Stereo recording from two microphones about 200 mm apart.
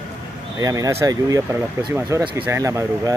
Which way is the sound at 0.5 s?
15° right (ahead or behind).